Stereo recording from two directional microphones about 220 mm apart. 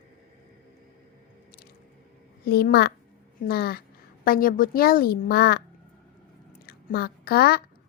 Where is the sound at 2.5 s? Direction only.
45° left (ahead or behind).